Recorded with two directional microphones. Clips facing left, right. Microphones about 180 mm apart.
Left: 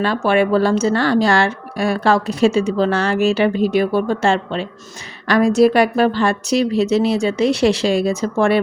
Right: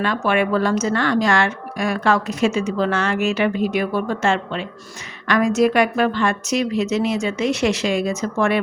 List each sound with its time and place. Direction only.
0.0 s speech: 30° left (ahead or behind)